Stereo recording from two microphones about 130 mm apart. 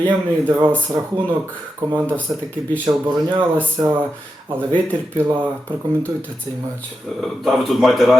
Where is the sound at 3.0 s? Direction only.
15° right (ahead or behind).